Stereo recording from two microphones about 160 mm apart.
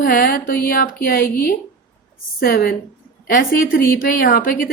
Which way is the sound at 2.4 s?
65° left (ahead or behind).